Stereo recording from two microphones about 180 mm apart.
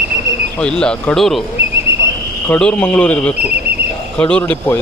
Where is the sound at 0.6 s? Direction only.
5° left (ahead or behind).